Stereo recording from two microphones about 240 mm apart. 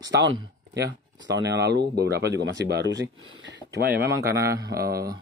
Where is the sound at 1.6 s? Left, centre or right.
Right.